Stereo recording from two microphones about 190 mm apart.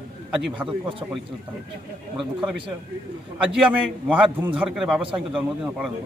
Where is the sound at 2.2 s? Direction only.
5° right (ahead or behind).